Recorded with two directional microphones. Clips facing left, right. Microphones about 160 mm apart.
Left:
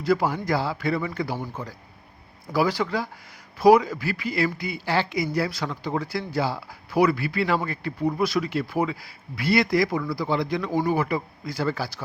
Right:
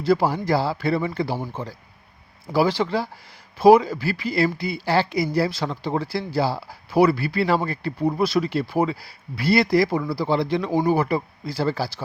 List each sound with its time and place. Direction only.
0.0 s speech: 30° right (ahead or behind)
2.5 s speech: 25° right (ahead or behind)